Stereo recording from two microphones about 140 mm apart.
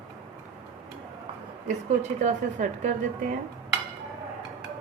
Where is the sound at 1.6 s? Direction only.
60° right (ahead or behind).